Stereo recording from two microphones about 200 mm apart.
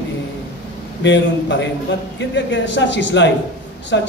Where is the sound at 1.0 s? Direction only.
60° left (ahead or behind).